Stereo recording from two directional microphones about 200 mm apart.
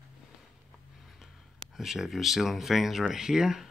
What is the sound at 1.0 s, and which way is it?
Speech, centre (ahead or behind).